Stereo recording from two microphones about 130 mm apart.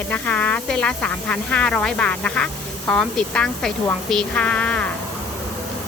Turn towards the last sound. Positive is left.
turn(degrees=10)  # may be behind; listen again after turning